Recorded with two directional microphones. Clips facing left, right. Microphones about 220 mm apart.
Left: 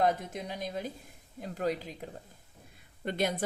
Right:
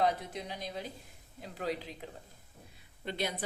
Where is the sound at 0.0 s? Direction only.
50° left (ahead or behind).